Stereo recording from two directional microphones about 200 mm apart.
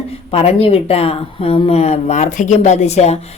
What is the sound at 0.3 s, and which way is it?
Speech, 30° left (ahead or behind).